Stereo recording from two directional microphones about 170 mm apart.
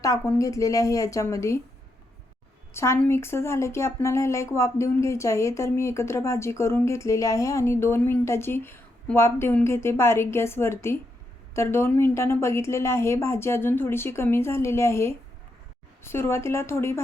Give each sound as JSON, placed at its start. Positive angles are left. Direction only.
{"t": 0.0, "sound": "a woman's voice", "side_deg": 20}
{"t": 2.7, "sound": "speech", "side_deg": 15}